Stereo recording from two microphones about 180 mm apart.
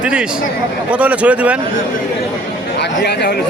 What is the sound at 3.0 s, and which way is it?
Speech, 65° left (ahead or behind).